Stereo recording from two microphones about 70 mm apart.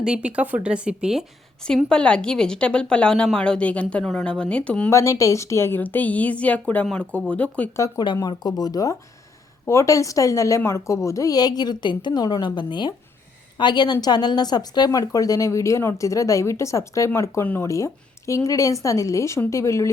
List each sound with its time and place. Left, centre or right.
0.0 s speech: centre
1.6 s a woman's voice: centre
4.9 s speech: left
5.8 s a woman's voice: left
7.9 s speech: left
9.6 s speech: left
11.3 s a woman's voice: left
14.8 s speech: left